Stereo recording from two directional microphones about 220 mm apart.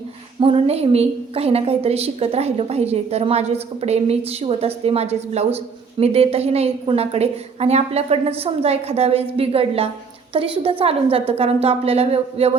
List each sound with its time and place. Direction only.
0.3 s a woman's voice: 25° right (ahead or behind)